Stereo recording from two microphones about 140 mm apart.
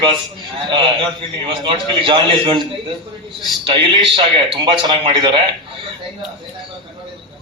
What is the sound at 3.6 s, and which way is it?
A man's voice, 35° right (ahead or behind).